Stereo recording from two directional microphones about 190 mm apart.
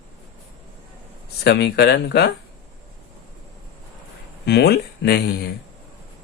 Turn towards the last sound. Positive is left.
turn(degrees=55)  # may be behind; listen again after turning